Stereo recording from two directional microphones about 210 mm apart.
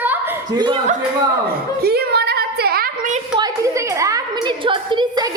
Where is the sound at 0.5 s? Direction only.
20° right (ahead or behind).